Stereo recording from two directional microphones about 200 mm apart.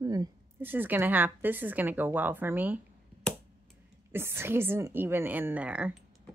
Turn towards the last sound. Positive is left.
turn(degrees=-5)  # may be behind; listen again after turning